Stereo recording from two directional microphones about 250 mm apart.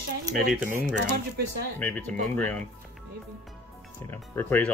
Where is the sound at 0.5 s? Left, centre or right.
Centre.